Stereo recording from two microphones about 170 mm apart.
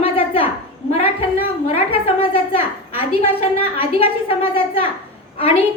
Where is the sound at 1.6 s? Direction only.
35° left (ahead or behind).